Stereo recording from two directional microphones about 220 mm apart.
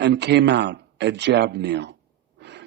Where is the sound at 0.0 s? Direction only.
50° right (ahead or behind).